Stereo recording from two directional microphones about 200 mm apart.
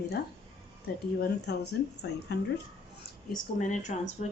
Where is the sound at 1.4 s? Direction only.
55° left (ahead or behind).